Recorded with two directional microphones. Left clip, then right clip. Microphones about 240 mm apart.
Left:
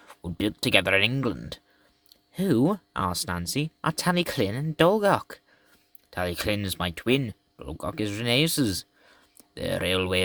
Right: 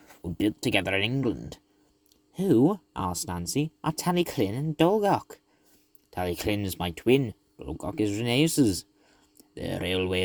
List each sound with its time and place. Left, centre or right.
0.3 s speech: centre